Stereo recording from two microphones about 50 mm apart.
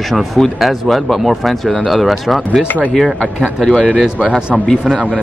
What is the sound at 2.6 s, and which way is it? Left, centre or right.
Speech, left.